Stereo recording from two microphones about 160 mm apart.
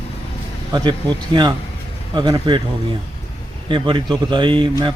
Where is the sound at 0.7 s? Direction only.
30° right (ahead or behind).